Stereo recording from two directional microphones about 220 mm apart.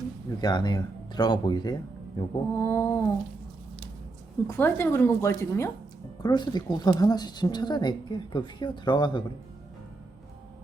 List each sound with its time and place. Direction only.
0.4 s a woman's voice: 20° left (ahead or behind)
4.4 s a woman's voice: 10° left (ahead or behind)